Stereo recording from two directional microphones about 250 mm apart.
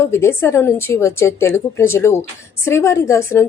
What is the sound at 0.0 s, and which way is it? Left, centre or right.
Speech, centre.